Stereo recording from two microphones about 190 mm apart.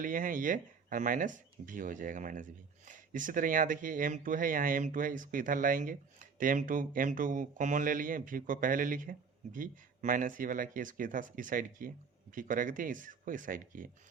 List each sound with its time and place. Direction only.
0.0 s speech: 45° right (ahead or behind)